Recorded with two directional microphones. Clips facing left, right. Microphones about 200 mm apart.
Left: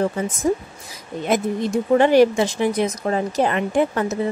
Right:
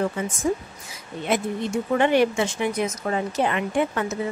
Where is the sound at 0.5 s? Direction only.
35° left (ahead or behind).